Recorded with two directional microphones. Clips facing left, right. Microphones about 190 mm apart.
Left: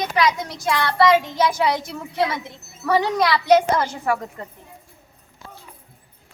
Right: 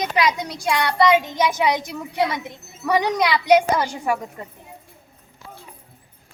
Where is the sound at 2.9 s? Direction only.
15° right (ahead or behind).